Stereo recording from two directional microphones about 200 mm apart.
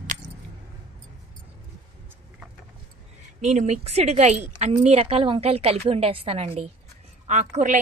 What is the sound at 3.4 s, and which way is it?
A woman's voice, 35° right (ahead or behind).